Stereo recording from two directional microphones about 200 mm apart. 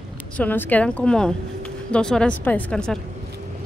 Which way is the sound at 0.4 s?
10° left (ahead or behind).